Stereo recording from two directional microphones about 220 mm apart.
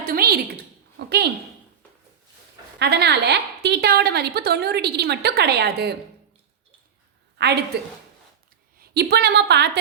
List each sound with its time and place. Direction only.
0.0 s a sound: 40° right (ahead or behind)
0.9 s a woman's voice: 45° right (ahead or behind)
2.7 s a woman's voice: 50° right (ahead or behind)
7.3 s a woman's voice: 50° right (ahead or behind)
8.8 s a woman's voice: 45° right (ahead or behind)